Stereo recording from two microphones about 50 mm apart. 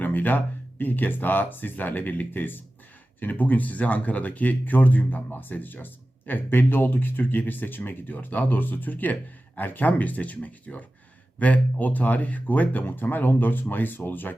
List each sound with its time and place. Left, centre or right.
0.0 s speech: left